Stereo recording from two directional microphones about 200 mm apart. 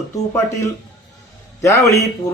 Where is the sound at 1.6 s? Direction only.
15° left (ahead or behind).